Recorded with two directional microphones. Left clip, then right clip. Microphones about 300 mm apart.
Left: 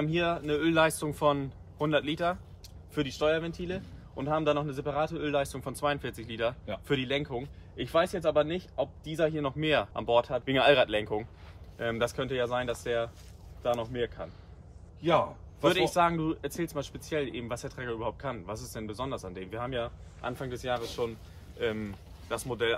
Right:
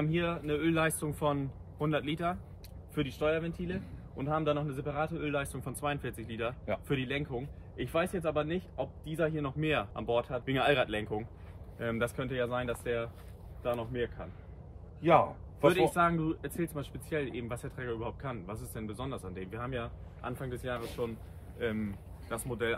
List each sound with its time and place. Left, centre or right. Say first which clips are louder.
0.0 s speech: left 4 dB; centre
15.0 s a man's voice: right 1 dB; centre
15.6 s speech: left 1 dB; centre